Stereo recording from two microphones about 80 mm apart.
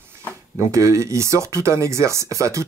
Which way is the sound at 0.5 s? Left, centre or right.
Right.